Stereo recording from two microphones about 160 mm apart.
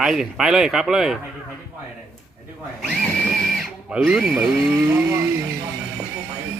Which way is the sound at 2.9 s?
5° left (ahead or behind).